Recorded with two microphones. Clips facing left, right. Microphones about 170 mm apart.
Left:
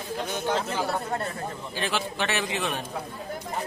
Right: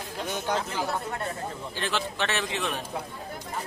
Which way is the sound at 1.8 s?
10° left (ahead or behind).